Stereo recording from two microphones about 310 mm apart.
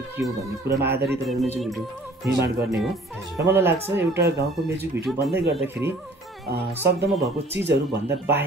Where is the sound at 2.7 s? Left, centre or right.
Centre.